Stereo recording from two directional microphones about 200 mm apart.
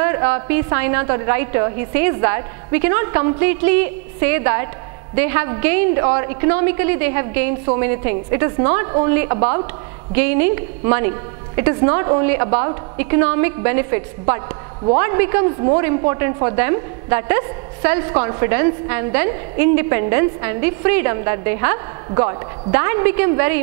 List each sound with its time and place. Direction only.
0.0 s a woman's voice: 10° right (ahead or behind)